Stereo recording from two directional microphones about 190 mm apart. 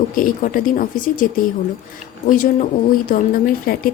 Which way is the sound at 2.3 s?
45° left (ahead or behind).